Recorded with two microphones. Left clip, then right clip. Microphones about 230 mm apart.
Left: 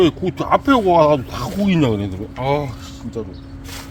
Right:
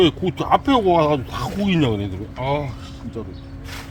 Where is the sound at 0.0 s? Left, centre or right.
Centre; by 3.2 s left.